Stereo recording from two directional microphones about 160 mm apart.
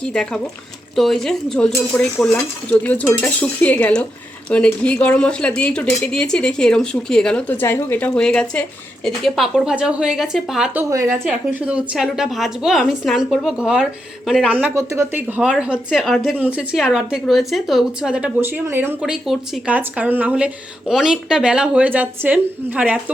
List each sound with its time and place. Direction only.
0.0 s a woman's voice: 5° left (ahead or behind)
10.8 s a woman's voice: 20° right (ahead or behind)
11.3 s a woman's voice: 5° right (ahead or behind)